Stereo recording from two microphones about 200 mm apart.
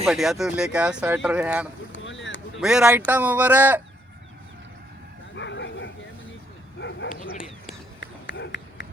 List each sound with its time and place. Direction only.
0.0 s speech: centre (ahead or behind)
1.9 s boat: 70° left (ahead or behind)
2.6 s speech: 5° right (ahead or behind)
5.3 s bow-wow: 65° left (ahead or behind)
8.0 s run: 60° left (ahead or behind)